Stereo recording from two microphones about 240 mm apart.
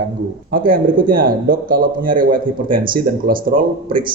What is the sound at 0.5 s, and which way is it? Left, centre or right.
Speech, right.